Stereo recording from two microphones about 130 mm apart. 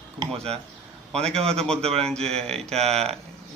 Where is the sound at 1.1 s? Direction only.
50° right (ahead or behind).